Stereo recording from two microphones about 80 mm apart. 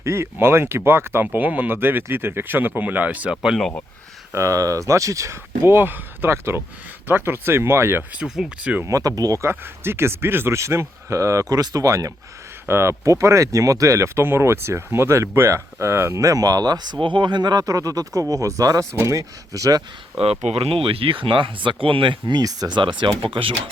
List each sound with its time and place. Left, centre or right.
0.0 s speech: right
4.3 s speech: right
8.1 s speech: centre
8.9 s speech: right
9.4 s speech: right
12.6 s speech: right
21.1 s speech: right
22.4 s speech: right
22.8 s speech: right